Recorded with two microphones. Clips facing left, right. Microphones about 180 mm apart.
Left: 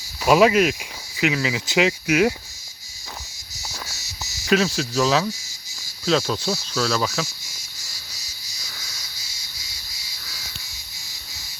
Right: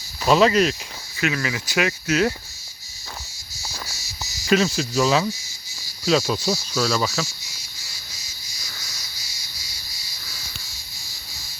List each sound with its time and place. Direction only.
0.3 s speech: 10° left (ahead or behind)
3.7 s cricket: centre (ahead or behind)
6.1 s speech: 5° right (ahead or behind)